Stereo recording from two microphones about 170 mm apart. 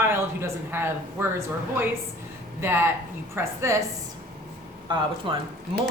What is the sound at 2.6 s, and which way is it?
Speech, 15° right (ahead or behind).